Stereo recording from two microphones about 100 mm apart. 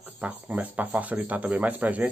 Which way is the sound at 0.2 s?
15° right (ahead or behind).